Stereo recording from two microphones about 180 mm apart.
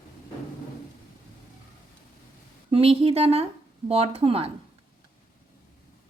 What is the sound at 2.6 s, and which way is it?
Speech, 30° right (ahead or behind).